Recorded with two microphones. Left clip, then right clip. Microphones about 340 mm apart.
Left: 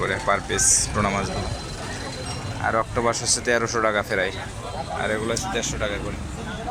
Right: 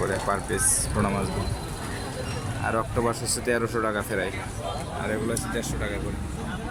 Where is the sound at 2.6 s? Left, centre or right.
Centre.